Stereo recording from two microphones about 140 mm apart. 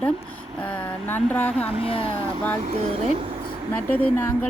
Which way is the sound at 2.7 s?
50° right (ahead or behind).